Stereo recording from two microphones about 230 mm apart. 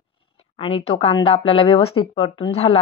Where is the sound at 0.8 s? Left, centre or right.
Left.